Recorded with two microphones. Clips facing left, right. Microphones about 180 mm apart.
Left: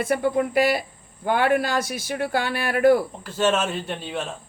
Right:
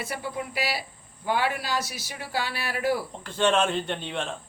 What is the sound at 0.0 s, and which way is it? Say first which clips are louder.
Speech: left 11 dB; 55° left (ahead or behind).